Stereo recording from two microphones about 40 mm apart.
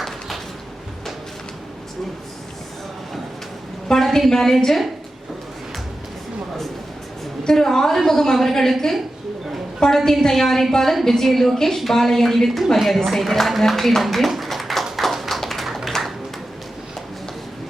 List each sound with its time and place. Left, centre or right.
4.0 s a woman's voice: centre
7.4 s a woman's voice: centre
9.9 s a woman's voice: centre
14.9 s clapping: centre